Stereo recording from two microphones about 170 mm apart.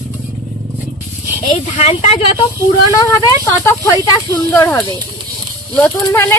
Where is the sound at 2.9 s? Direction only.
20° left (ahead or behind).